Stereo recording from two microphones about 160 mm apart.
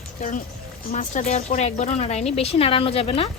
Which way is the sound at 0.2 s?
55° left (ahead or behind).